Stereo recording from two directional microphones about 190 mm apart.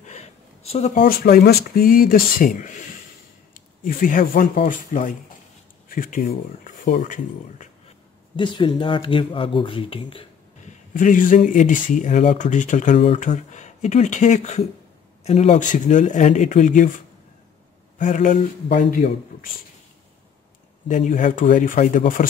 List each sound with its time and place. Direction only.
0.0 s speech: 35° left (ahead or behind)
8.4 s speech: 25° left (ahead or behind)
10.9 s speech: 45° left (ahead or behind)
17.9 s speech: 45° left (ahead or behind)
20.9 s speech: 40° left (ahead or behind)